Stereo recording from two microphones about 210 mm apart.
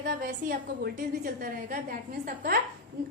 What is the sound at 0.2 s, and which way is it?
A woman's voice, 45° right (ahead or behind).